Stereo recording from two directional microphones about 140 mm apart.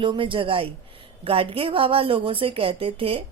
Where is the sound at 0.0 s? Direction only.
35° right (ahead or behind).